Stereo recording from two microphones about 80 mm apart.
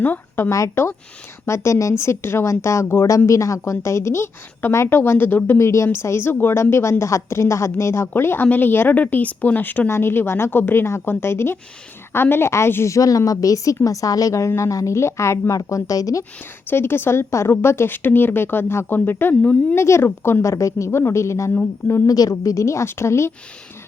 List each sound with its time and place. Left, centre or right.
0.0 s a woman's voice: left
0.5 s a woman's voice: left
5.5 s a woman's voice: left
16.6 s a woman's voice: left
19.7 s a woman's voice: left
20.4 s a woman's voice: left